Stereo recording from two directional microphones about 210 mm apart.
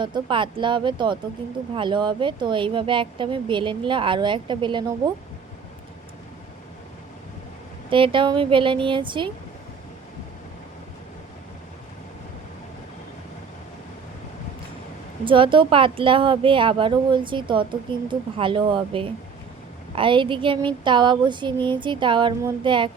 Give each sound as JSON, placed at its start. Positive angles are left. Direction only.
{"t": 0.0, "sound": "speech", "side_deg": -20}
{"t": 7.9, "sound": "speech", "side_deg": -25}
{"t": 15.2, "sound": "speech", "side_deg": -25}